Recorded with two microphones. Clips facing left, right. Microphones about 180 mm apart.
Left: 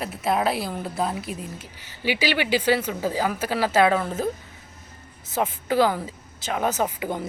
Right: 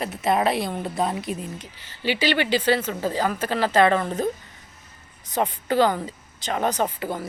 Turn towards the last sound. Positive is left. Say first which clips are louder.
# even
turn(degrees=15)  # may be behind; listen again after turning